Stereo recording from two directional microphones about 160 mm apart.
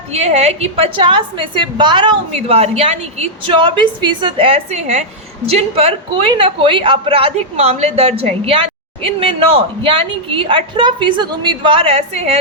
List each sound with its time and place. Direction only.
0.1 s a woman's voice: 45° right (ahead or behind)